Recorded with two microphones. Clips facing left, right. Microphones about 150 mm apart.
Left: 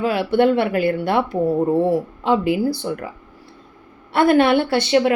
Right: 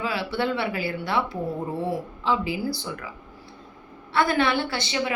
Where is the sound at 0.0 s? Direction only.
55° left (ahead or behind).